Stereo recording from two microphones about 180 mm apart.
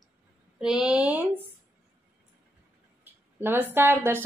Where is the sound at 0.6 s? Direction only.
5° right (ahead or behind).